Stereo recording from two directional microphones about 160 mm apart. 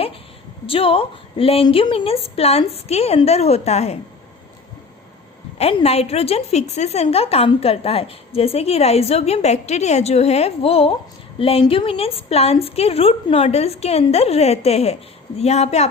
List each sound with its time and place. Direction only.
0.7 s a woman's voice: 35° left (ahead or behind)
5.5 s a woman's voice: 40° left (ahead or behind)